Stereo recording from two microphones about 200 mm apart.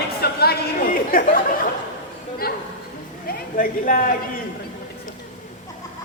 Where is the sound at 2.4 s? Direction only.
50° left (ahead or behind).